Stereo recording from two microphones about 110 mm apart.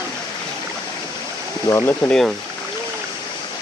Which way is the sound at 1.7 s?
20° left (ahead or behind).